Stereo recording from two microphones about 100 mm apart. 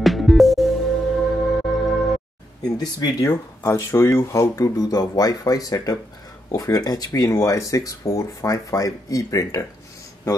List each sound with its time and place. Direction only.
0.0 s music: centre (ahead or behind)
2.8 s speech: 40° left (ahead or behind)